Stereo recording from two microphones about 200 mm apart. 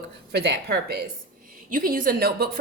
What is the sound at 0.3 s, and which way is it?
Speech, 55° right (ahead or behind).